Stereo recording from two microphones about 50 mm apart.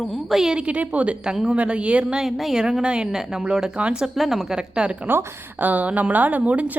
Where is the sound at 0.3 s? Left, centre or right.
Centre.